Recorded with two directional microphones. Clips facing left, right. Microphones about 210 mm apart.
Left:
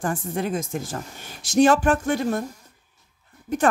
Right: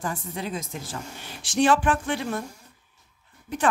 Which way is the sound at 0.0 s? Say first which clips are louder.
Left 5 dB; 50° left (ahead or behind).